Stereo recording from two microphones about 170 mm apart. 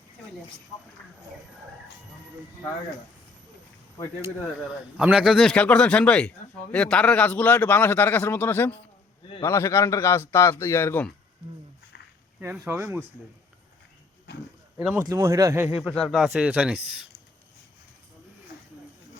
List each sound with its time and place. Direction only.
4.9 s a man's voice: 5° right (ahead or behind); by 11.1 s 10° left (ahead or behind)
12.4 s speech: 10° right (ahead or behind)
14.3 s speech: 90° left
14.8 s speech: 10° right (ahead or behind)
15.7 s speech: 5° left (ahead or behind)